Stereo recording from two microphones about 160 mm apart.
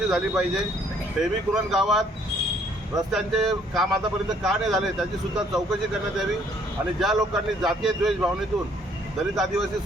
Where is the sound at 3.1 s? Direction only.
Centre (ahead or behind).